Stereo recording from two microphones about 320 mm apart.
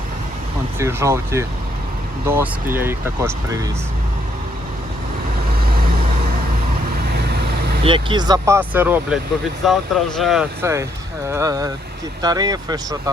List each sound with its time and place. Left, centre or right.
0.8 s speech: centre
7.9 s speech: centre